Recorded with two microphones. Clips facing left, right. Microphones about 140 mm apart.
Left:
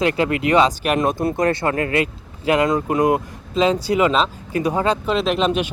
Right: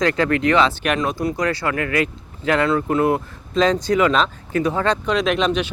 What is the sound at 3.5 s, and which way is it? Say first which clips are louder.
Speech: even; 5° left (ahead or behind).